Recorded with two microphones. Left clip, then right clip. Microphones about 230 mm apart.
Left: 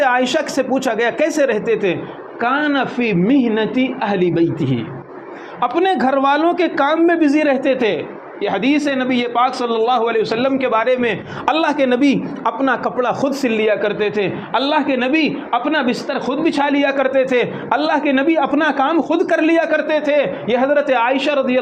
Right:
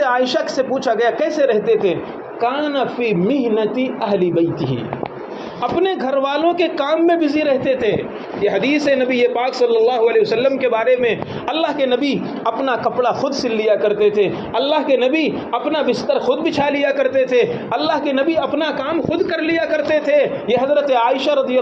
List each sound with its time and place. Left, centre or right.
0.0 s a man's voice: left
8.4 s a man's voice: left